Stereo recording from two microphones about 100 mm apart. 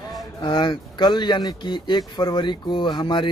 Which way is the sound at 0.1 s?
50° left (ahead or behind).